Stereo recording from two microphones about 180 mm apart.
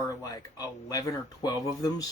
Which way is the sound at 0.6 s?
20° left (ahead or behind).